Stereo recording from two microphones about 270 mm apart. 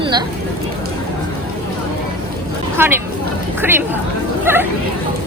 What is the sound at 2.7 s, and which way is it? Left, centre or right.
Speech, centre.